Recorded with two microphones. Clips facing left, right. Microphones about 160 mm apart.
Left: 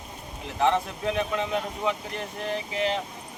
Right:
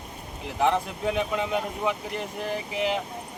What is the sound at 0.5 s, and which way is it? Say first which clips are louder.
Speech: even; 10° right (ahead or behind).